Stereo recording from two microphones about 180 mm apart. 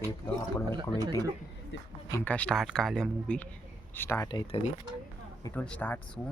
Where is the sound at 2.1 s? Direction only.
10° left (ahead or behind).